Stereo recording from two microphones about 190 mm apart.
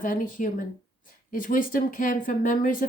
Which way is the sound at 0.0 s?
45° left (ahead or behind).